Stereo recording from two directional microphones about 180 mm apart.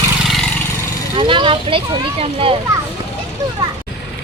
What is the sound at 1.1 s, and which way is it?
Speech, 30° right (ahead or behind).